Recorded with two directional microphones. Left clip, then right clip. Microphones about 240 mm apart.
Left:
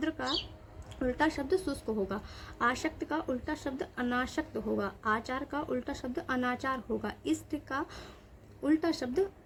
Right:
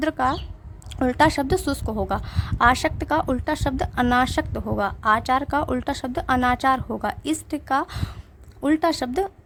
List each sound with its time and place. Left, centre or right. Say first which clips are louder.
0.0 s a woman's voice: right 11 dB; right